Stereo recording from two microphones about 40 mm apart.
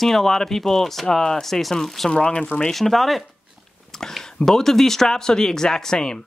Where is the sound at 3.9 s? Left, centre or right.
Centre.